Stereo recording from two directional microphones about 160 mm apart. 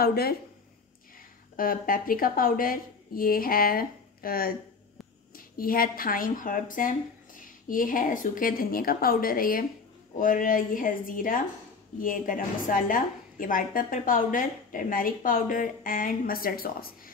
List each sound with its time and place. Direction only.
0.0 s speech: 75° left (ahead or behind)
1.6 s a woman's voice: 65° left (ahead or behind)